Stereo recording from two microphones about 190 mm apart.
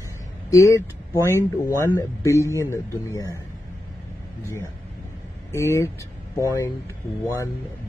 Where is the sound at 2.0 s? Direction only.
15° left (ahead or behind).